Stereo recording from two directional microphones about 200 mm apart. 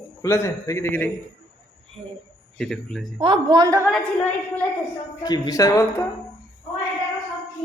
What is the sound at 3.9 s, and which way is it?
Speech, 5° left (ahead or behind).